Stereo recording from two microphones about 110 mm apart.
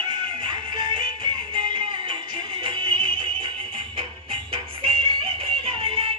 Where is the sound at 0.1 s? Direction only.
50° right (ahead or behind).